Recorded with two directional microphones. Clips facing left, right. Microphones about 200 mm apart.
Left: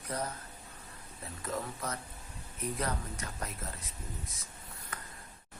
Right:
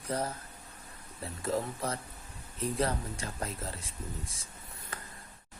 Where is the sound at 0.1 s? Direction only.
30° right (ahead or behind).